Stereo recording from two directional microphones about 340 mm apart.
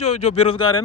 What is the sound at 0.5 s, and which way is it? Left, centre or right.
Speech, left.